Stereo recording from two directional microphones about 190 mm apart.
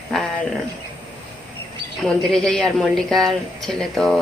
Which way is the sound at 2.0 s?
Centre (ahead or behind).